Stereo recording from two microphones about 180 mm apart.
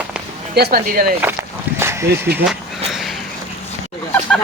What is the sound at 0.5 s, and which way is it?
Speech, 60° right (ahead or behind).